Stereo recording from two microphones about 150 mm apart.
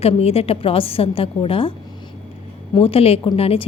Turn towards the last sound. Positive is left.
turn(degrees=40)  # may be behind; listen again after turning